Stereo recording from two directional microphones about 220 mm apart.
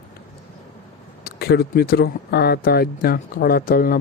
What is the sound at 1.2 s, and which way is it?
Speech, 45° left (ahead or behind).